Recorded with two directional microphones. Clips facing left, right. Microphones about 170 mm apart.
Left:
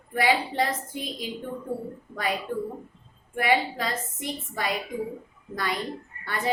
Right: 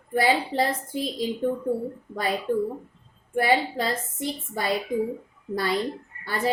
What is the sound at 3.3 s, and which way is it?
A woman's voice, 30° right (ahead or behind).